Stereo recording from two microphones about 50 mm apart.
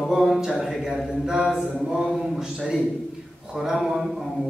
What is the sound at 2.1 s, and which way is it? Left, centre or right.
Speech, centre.